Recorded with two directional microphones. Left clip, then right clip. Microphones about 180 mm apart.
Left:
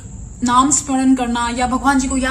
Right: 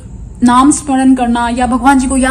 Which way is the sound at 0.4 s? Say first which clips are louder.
Right 6 dB; 40° right (ahead or behind).